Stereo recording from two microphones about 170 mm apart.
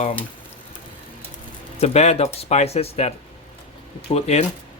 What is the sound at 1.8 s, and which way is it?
Speech, 40° left (ahead or behind).